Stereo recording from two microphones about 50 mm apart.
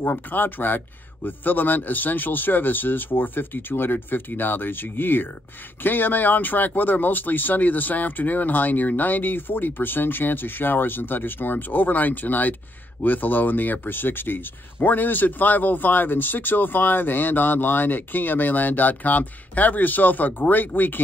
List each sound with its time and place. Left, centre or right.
0.0 s speech: left